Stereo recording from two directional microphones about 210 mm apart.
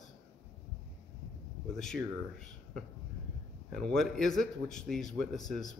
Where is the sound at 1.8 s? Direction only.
Centre (ahead or behind).